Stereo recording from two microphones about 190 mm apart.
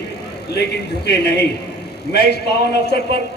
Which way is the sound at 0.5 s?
60° left (ahead or behind).